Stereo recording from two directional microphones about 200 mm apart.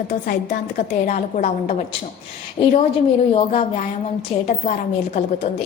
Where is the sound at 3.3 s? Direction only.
35° left (ahead or behind).